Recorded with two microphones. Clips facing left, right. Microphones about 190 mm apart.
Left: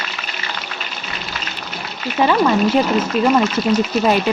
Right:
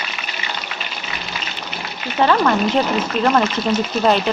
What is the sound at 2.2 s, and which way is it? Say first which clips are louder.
Speech: even; 10° left (ahead or behind).